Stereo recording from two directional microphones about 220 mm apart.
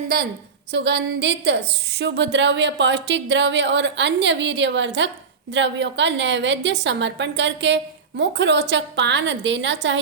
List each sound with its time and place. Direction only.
0.7 s speech: 50° right (ahead or behind)